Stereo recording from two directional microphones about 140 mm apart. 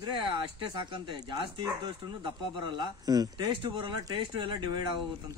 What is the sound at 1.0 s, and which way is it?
Speech, 35° right (ahead or behind).